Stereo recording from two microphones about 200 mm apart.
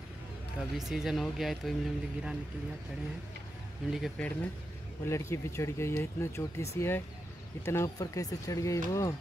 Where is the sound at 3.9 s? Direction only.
5° left (ahead or behind).